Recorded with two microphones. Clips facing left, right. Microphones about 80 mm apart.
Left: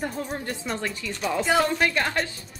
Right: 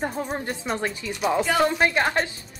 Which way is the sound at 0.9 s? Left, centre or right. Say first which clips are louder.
Right 4 dB; centre.